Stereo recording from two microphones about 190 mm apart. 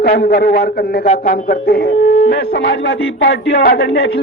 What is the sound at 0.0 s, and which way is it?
A man's voice, 55° left (ahead or behind).